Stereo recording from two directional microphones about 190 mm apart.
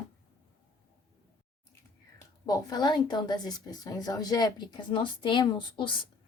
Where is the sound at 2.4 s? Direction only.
20° left (ahead or behind).